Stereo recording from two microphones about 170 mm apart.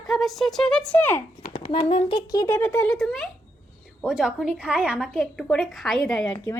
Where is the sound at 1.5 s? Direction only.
35° left (ahead or behind).